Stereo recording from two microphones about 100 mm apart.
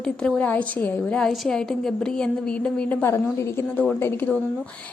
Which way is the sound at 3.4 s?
25° left (ahead or behind).